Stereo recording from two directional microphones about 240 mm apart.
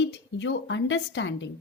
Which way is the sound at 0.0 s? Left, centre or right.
Left.